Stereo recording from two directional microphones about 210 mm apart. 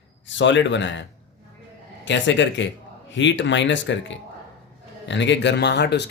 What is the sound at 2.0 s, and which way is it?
Speech, 60° left (ahead or behind).